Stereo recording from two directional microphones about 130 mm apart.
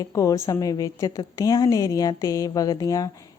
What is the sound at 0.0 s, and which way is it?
A woman's voice, 25° left (ahead or behind).